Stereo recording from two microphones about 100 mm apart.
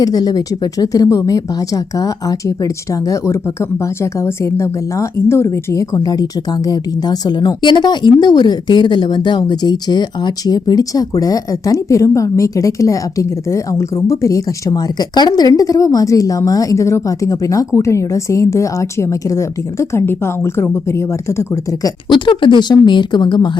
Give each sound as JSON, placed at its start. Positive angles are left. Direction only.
{"t": 0.0, "sound": "a woman's voice", "side_deg": 40}
{"t": 15.5, "sound": "a woman's voice", "side_deg": 35}
{"t": 22.1, "sound": "a woman's voice", "side_deg": 55}